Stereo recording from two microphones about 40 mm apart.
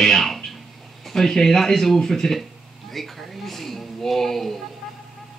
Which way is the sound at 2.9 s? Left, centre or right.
Centre.